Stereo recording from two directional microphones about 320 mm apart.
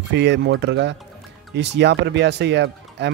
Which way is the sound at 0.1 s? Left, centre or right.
Right.